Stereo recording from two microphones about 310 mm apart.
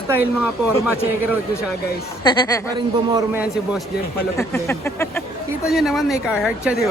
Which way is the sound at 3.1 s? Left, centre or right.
Centre.